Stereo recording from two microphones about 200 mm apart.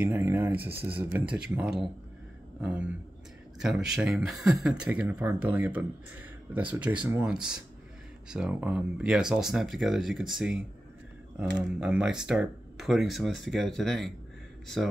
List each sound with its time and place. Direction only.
0.0 s speech: 10° right (ahead or behind)